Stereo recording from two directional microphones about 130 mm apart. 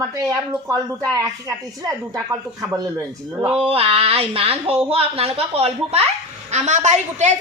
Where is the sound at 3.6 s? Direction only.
45° right (ahead or behind).